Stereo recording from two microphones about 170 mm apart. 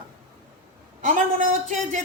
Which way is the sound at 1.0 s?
50° right (ahead or behind).